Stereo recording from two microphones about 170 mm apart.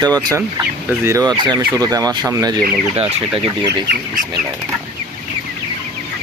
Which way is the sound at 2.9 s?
35° right (ahead or behind).